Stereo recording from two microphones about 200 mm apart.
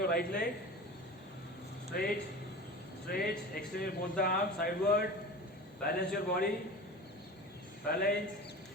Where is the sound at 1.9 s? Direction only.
50° left (ahead or behind).